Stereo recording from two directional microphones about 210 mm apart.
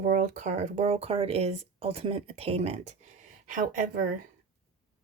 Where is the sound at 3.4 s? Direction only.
40° right (ahead or behind).